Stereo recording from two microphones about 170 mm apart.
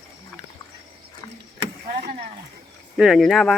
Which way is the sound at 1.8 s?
55° right (ahead or behind).